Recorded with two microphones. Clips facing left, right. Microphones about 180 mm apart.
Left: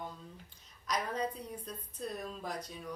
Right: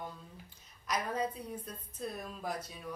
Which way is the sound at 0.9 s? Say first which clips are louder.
Right 1 dB; 5° right (ahead or behind).